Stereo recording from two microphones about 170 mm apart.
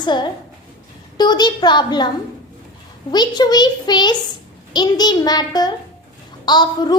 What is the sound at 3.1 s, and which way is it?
A child's voice, 25° left (ahead or behind).